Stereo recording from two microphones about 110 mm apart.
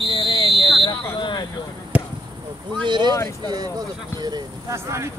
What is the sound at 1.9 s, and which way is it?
Basketball bounce, 10° right (ahead or behind).